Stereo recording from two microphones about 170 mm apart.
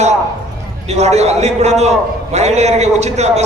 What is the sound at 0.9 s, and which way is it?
A man's voice, 40° right (ahead or behind).